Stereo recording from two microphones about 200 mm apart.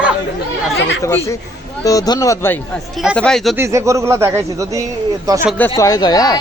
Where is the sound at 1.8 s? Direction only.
20° left (ahead or behind).